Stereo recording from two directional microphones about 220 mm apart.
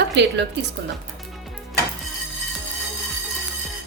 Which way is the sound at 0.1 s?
50° right (ahead or behind).